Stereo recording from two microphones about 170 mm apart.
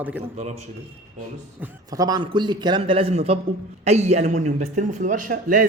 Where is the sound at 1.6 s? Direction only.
10° right (ahead or behind).